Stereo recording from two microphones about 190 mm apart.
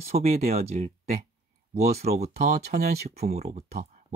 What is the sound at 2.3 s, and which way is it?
Speech, 55° right (ahead or behind).